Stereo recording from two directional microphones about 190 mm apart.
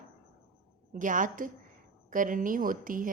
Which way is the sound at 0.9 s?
45° right (ahead or behind).